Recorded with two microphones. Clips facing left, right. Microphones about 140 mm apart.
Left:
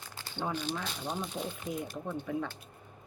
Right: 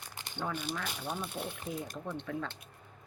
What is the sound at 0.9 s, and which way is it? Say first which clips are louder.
Speech: left 1 dB; 10° right (ahead or behind).